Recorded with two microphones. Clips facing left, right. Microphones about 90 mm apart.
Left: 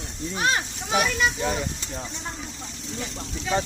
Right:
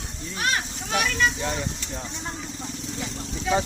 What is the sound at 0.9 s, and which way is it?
Speech, 10° left (ahead or behind).